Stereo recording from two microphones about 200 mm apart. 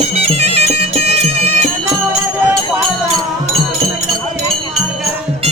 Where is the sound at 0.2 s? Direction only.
30° right (ahead or behind).